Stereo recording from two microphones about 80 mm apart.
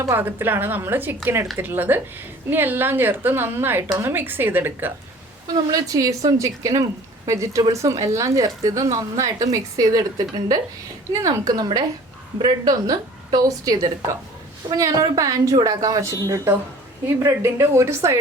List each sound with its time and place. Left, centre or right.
0.0 s a woman's voice: right
5.7 s speech: right
11.1 s a woman's voice: right
14.8 s a woman's voice: right